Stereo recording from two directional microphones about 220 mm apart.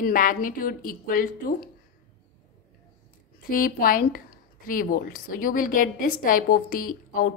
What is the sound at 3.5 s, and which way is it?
Speech, 40° left (ahead or behind).